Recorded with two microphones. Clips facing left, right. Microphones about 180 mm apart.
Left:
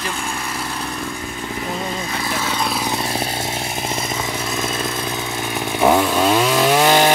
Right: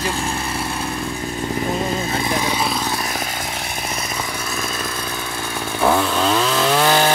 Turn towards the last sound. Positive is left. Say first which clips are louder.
# left 2 dB
turn(degrees=15)  # may be behind; listen again after turning